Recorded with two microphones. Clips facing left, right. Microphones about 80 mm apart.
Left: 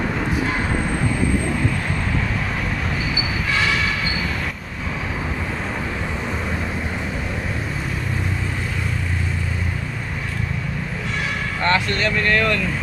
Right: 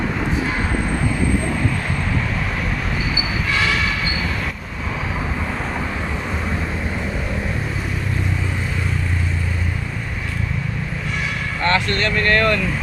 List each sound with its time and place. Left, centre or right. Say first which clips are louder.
11.6 s speech: right 1 dB; centre